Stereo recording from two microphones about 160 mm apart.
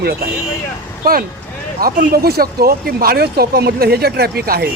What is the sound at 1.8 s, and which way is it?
Speech, 70° right (ahead or behind).